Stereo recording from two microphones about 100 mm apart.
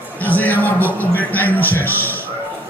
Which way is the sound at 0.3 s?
15° left (ahead or behind).